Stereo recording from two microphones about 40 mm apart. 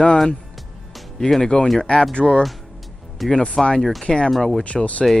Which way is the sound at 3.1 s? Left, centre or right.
Centre.